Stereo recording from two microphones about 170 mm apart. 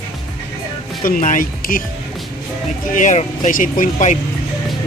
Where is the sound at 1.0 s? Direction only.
50° left (ahead or behind).